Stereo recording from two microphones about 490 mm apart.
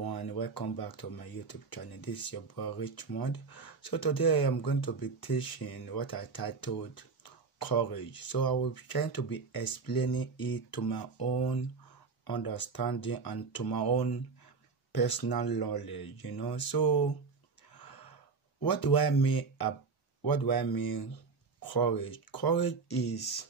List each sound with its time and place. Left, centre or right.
0.0 s speech: left
17.7 s gasp: left
18.6 s speech: left